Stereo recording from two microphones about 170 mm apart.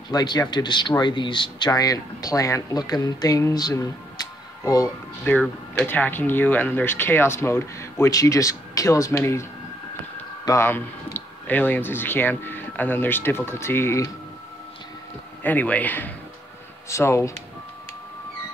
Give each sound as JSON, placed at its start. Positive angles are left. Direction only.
{"t": 0.1, "sound": "speech", "side_deg": 25}
{"t": 15.4, "sound": "speech", "side_deg": 10}